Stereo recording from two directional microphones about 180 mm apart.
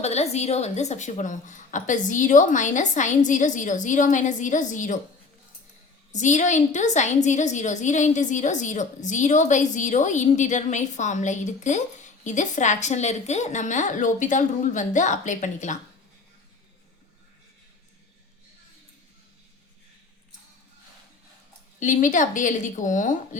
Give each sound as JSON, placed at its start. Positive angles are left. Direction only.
{"t": 0.0, "sound": "a woman's voice", "side_deg": 35}
{"t": 6.1, "sound": "a woman's voice", "side_deg": 40}
{"t": 21.8, "sound": "a woman's voice", "side_deg": 45}